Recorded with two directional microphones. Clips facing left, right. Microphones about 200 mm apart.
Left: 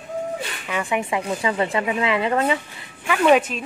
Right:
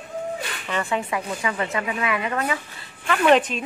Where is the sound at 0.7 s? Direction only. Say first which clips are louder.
Left 2 dB; 10° left (ahead or behind).